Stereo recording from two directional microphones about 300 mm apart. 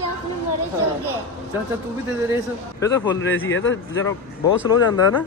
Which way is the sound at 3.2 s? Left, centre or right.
Left.